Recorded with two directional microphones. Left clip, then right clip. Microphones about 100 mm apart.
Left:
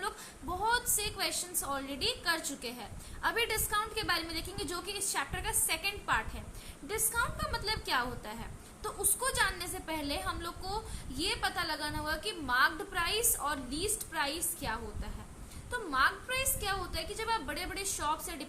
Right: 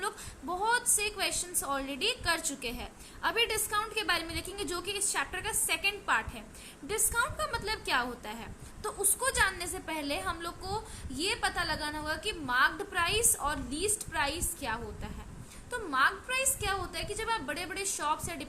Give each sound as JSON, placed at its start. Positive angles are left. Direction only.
{"t": 0.6, "sound": "a woman's voice", "side_deg": -30}